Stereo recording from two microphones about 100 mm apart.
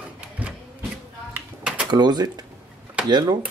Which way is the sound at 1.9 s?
45° right (ahead or behind).